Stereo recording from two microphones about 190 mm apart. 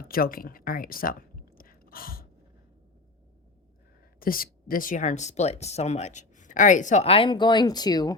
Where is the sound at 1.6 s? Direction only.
50° left (ahead or behind).